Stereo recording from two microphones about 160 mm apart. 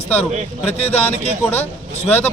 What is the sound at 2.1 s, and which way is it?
Speech, 10° left (ahead or behind).